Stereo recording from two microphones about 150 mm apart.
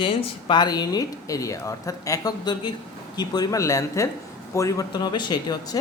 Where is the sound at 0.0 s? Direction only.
30° left (ahead or behind).